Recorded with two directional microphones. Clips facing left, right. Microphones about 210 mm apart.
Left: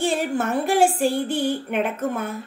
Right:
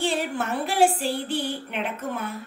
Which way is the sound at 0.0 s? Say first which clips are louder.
Left 4 dB; 45° left (ahead or behind).